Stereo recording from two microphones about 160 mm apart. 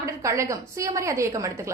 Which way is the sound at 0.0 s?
20° right (ahead or behind).